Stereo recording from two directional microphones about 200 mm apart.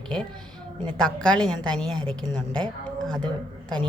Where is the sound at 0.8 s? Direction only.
20° right (ahead or behind).